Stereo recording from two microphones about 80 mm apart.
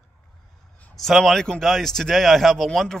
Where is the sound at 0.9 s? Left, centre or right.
Centre.